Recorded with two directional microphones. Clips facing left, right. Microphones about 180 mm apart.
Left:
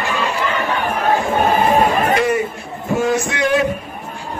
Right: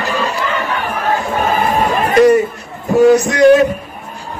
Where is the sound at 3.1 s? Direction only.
40° right (ahead or behind).